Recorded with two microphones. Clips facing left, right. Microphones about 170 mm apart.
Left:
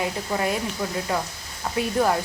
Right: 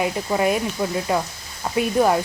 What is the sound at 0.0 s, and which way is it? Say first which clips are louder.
Speech: right 5 dB; 20° right (ahead or behind).